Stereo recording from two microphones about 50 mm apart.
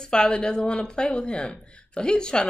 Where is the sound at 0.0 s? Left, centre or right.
Centre.